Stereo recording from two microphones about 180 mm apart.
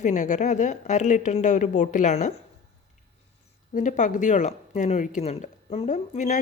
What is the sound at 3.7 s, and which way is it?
Speech, 45° left (ahead or behind).